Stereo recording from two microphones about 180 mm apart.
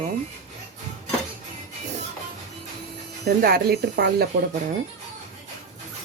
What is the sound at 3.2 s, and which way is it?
Speech, 60° right (ahead or behind).